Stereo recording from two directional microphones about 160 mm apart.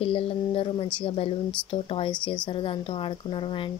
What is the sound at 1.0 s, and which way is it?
Speech, 35° left (ahead or behind).